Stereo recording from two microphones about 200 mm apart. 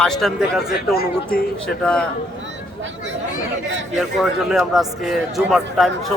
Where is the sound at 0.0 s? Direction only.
Centre (ahead or behind).